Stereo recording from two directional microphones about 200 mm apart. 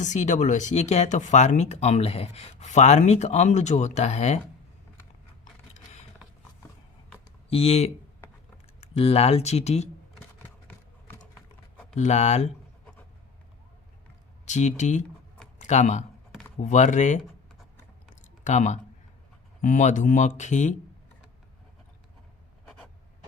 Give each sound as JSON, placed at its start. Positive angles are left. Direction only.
{"t": 0.0, "sound": "speech", "side_deg": 35}
{"t": 7.5, "sound": "speech", "side_deg": 30}
{"t": 8.9, "sound": "speech", "side_deg": 30}
{"t": 11.9, "sound": "speech", "side_deg": 35}
{"t": 14.4, "sound": "speech", "side_deg": 35}
{"t": 18.1, "sound": "a sound", "side_deg": 35}
{"t": 19.6, "sound": "speech", "side_deg": 35}